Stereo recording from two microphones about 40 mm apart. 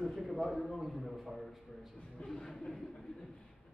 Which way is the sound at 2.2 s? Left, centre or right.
Centre.